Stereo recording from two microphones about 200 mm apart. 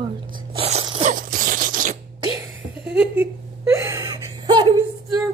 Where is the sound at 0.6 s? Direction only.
30° right (ahead or behind).